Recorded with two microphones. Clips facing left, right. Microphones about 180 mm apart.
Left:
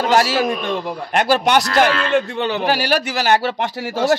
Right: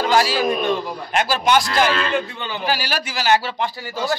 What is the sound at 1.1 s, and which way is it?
Speech, 60° left (ahead or behind).